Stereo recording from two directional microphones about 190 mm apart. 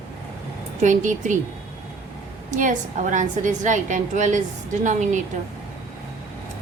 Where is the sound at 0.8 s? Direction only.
40° right (ahead or behind).